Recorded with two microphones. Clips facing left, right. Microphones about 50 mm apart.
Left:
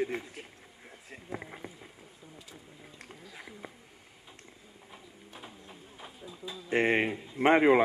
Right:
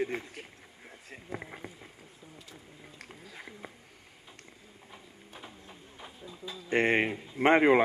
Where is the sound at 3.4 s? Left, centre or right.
Centre.